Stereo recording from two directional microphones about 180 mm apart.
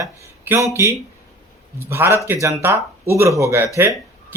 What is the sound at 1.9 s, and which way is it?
Speech, 15° right (ahead or behind).